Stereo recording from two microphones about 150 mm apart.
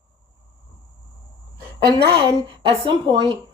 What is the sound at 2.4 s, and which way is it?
Speech, 35° right (ahead or behind).